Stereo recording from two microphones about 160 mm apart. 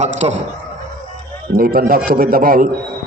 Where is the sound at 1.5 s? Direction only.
65° right (ahead or behind).